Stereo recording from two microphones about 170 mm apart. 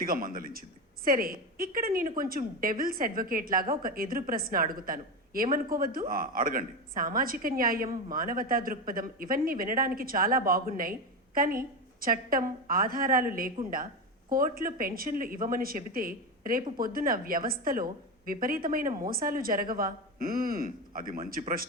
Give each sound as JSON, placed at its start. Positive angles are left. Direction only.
{"t": 0.0, "sound": "a woman's voice", "side_deg": -55}